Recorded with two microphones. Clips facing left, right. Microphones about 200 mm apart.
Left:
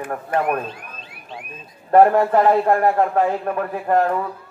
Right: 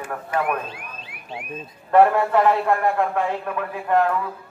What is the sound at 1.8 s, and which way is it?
A man's voice, 35° left (ahead or behind).